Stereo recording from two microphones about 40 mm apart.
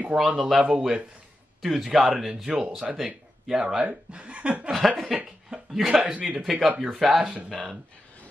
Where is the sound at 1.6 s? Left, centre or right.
Centre.